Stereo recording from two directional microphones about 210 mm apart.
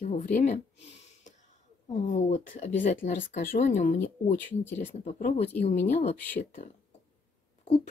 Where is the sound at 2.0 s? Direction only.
35° left (ahead or behind).